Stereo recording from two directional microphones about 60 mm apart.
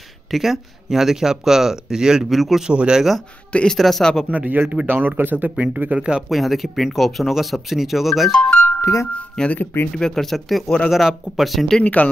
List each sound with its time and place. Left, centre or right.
0.3 s speech: centre
2.7 s speech: centre
3.7 s speech: centre
4.3 s speech: right
4.8 s speech: right; by 6.2 s centre
6.2 s speech: centre
8.3 s speech: left
8.8 s speech: left
9.1 s speech: left
9.9 s speech: centre
11.8 s speech: left